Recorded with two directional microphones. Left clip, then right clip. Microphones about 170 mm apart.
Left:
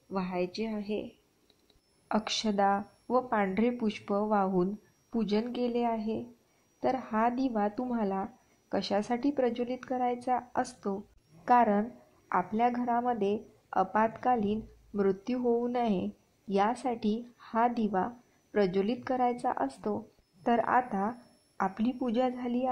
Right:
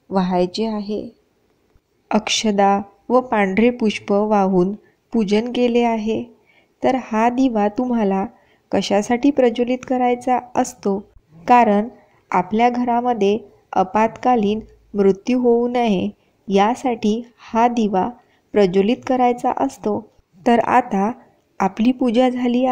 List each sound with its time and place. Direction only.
0.1 s speech: 35° right (ahead or behind)
2.0 s a woman's voice: 30° right (ahead or behind)